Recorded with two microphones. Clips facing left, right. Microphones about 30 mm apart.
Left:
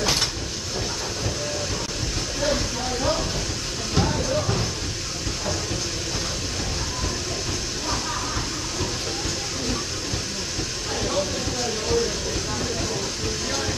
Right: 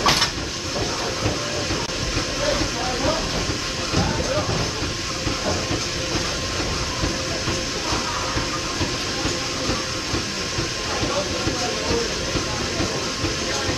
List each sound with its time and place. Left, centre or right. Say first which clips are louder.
0.0 s train: right 4 dB; right